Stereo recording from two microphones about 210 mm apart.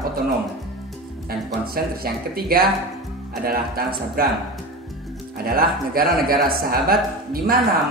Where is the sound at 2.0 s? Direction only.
45° right (ahead or behind).